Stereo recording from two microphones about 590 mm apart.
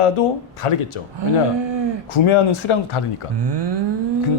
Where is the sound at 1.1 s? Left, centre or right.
Right.